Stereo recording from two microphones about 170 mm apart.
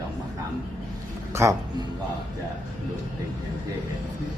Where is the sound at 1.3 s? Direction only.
15° right (ahead or behind).